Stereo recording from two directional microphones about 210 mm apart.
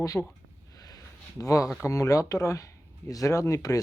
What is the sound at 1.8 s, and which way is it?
Speech, 15° left (ahead or behind).